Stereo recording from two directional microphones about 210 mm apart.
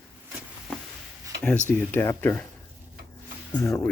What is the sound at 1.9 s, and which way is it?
Speech, 10° left (ahead or behind).